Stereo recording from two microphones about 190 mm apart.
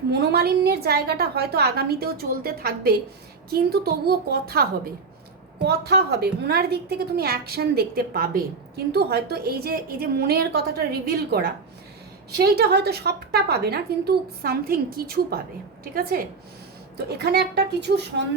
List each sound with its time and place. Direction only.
0.1 s a woman's voice: 60° right (ahead or behind)